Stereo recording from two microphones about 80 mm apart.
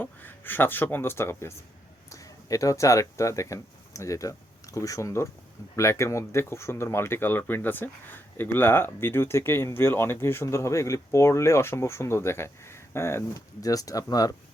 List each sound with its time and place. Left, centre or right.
0.0 s speech: left
2.0 s speech: left
13.6 s speech: left